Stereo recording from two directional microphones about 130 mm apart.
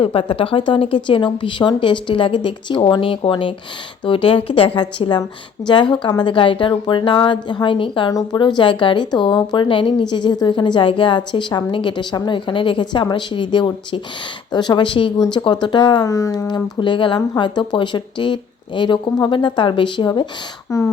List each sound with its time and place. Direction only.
0.0 s a woman's voice: 45° left (ahead or behind); by 16.6 s 25° left (ahead or behind)
16.8 s speech: 40° left (ahead or behind)
20.7 s speech: 25° left (ahead or behind)